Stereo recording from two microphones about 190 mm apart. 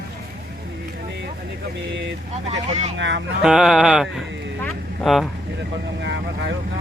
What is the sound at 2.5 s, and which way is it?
Speech, 35° right (ahead or behind).